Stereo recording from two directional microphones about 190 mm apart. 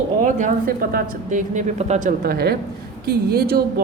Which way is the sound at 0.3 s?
45° right (ahead or behind).